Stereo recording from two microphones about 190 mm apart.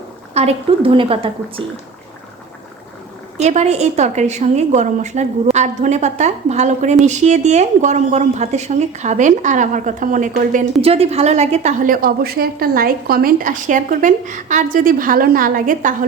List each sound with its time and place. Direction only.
0.3 s a woman's voice: 30° right (ahead or behind)
3.3 s a woman's voice: 35° right (ahead or behind)
10.8 s a woman's voice: 30° right (ahead or behind)